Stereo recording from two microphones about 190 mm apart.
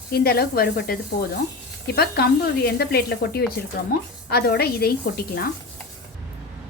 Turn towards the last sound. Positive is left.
turn(degrees=55)  # may be behind; listen again after turning